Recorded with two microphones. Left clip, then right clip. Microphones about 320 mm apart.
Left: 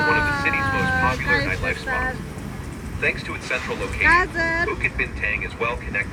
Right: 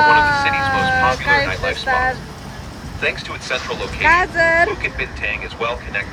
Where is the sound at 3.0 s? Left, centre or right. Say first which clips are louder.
Right 2 dB; right.